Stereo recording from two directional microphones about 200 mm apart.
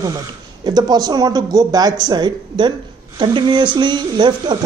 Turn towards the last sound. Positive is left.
turn(degrees=-20)  # may be behind; listen again after turning